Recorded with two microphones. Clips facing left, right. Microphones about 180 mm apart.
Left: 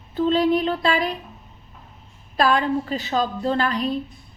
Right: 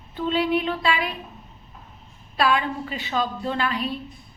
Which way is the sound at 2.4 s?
40° left (ahead or behind).